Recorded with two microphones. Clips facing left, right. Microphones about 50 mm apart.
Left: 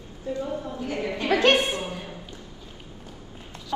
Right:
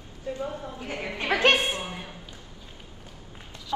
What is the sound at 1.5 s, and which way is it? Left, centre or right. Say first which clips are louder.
Speech: left 3 dB; left.